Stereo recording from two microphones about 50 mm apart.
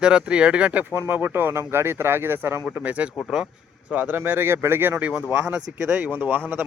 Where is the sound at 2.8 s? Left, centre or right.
Right.